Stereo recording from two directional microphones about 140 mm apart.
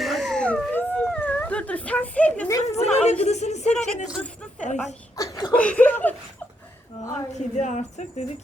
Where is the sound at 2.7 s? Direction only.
50° left (ahead or behind).